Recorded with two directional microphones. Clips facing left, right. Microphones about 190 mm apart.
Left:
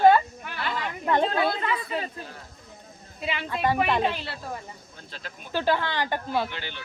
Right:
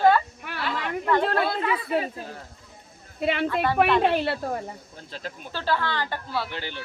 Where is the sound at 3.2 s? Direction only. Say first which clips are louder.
Right 3 dB; 55° right (ahead or behind).